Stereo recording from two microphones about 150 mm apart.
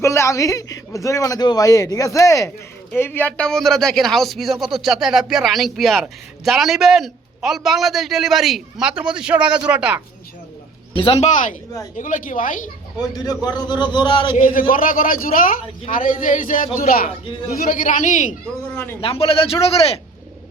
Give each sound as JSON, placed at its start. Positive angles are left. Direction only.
{"t": 0.0, "sound": "a man's voice", "side_deg": 20}
{"t": 10.9, "sound": "a man's voice", "side_deg": 40}
{"t": 11.9, "sound": "a woman's voice", "side_deg": 60}
{"t": 13.0, "sound": "a man's voice", "side_deg": 25}
{"t": 14.3, "sound": "a man's voice", "side_deg": 65}
{"t": 16.8, "sound": "a man's voice", "side_deg": 75}
{"t": 18.7, "sound": "speech", "side_deg": 15}
{"t": 19.0, "sound": "a man's voice", "side_deg": 40}